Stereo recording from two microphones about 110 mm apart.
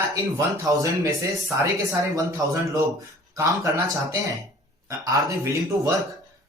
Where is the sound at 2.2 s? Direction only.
30° right (ahead or behind).